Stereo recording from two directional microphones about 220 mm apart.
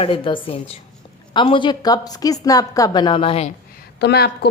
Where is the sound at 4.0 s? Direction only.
50° left (ahead or behind).